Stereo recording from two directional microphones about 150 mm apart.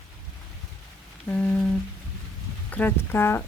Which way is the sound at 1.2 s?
10° left (ahead or behind).